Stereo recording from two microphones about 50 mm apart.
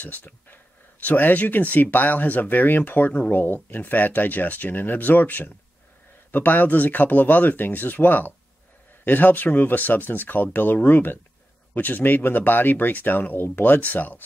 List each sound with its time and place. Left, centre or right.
0.0 s speech: left